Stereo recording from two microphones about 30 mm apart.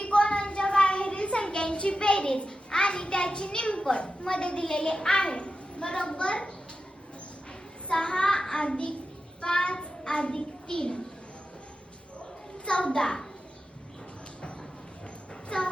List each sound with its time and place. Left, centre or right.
0.0 s a sound: left
3.9 s a child's voice: left
7.9 s a child's voice: left
9.4 s child singing: left
12.6 s a child's voice: left
15.4 s music: left